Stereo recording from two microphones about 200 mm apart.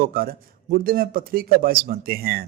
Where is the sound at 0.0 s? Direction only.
45° right (ahead or behind).